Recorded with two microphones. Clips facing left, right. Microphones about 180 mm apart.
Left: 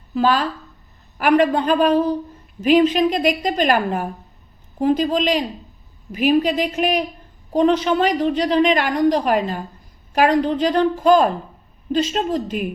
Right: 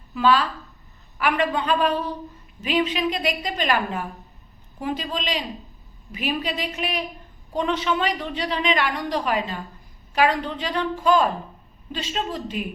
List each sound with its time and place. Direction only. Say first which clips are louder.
0.1 s a woman's voice: left 2 dB; 40° left (ahead or behind)